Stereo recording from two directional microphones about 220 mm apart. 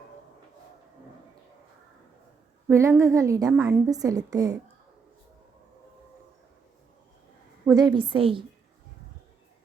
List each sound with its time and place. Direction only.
2.6 s a woman's voice: 10° right (ahead or behind)
7.7 s a woman's voice: 20° right (ahead or behind)